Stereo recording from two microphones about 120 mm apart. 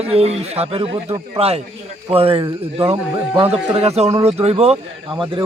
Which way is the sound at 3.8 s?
60° right (ahead or behind).